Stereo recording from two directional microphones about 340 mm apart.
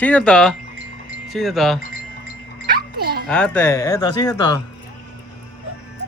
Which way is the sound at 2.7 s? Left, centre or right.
Right.